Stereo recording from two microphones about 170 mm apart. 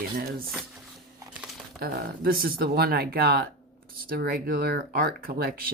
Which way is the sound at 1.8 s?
65° right (ahead or behind).